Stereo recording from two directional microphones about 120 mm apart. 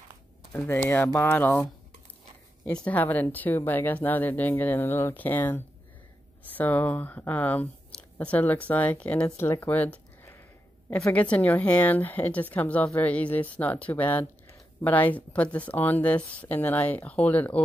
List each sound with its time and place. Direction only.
0.5 s a woman's voice: 15° left (ahead or behind)
2.6 s a woman's voice: 10° left (ahead or behind)
9.6 s a sound: 15° left (ahead or behind)
11.1 s a woman's voice: 10° left (ahead or behind)